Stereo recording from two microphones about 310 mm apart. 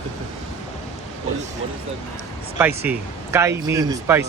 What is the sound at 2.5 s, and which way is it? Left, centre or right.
Speech, centre.